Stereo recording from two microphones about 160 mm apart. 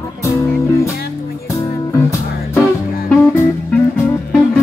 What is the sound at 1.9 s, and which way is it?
Music, 20° left (ahead or behind).